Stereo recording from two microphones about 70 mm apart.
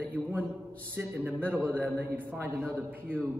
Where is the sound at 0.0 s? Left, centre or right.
Right.